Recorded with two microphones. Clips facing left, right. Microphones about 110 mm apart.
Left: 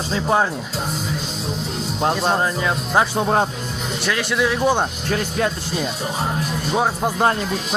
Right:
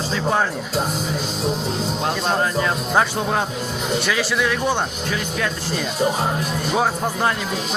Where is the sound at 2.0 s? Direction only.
20° left (ahead or behind).